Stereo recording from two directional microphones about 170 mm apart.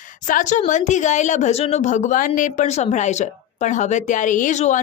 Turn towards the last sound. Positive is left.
turn(degrees=45)  # may be behind; listen again after turning